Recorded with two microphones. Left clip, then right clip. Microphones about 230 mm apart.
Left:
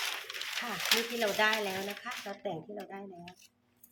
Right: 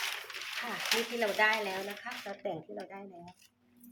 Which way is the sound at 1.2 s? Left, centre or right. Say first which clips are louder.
Even; centre.